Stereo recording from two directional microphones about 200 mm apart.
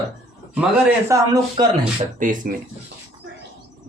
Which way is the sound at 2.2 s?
40° right (ahead or behind).